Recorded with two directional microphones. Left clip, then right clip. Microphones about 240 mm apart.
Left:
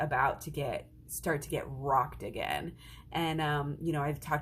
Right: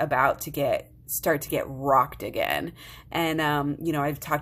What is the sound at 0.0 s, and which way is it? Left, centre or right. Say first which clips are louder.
Speech: right 7 dB; right.